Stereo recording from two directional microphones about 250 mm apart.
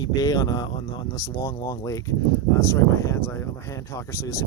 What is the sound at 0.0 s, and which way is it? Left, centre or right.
Speech, centre.